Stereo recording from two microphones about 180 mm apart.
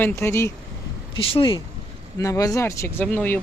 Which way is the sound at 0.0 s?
15° left (ahead or behind).